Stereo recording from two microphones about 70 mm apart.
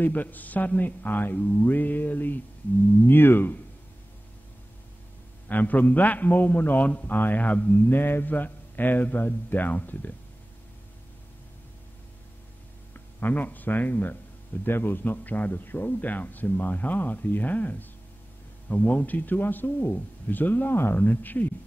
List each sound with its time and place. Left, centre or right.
0.0 s a man's voice: left
5.5 s a man's voice: left
12.9 s a man's voice: left